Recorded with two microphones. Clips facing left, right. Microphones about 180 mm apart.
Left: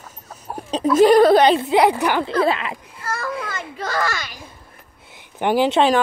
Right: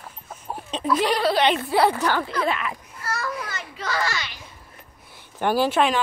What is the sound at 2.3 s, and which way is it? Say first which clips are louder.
Speech: left 6 dB; 30° left (ahead or behind).